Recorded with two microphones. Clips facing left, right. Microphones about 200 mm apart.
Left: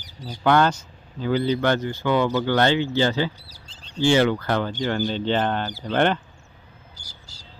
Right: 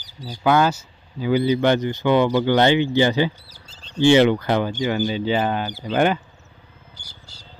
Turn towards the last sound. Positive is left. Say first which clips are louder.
# right 1 dB
turn(degrees=-60)  # may be behind; listen again after turning